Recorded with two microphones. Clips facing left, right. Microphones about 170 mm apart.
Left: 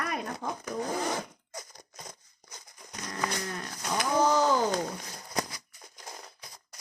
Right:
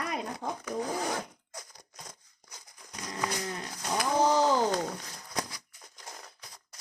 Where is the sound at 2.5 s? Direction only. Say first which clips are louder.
Left 2 dB; centre (ahead or behind).